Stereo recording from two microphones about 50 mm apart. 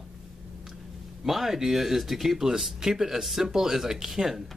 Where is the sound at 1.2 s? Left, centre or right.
Centre.